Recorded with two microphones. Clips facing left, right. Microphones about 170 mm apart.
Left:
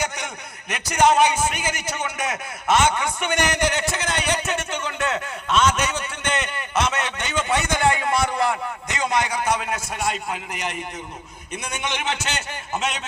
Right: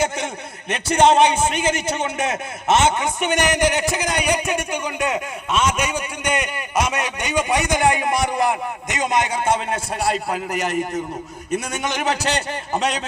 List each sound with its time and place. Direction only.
0.7 s a man's voice: 30° right (ahead or behind)